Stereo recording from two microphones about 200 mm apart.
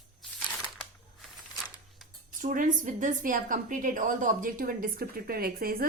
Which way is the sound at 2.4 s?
40° right (ahead or behind).